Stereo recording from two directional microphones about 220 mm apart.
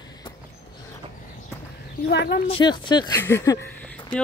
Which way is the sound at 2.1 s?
50° left (ahead or behind).